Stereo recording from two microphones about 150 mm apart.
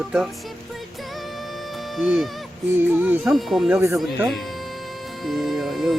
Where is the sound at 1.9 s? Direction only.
Centre (ahead or behind).